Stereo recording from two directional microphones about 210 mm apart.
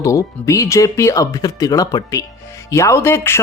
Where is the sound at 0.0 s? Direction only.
15° left (ahead or behind).